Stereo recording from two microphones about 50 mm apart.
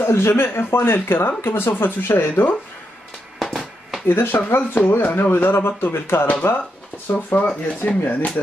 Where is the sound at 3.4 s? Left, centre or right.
Centre.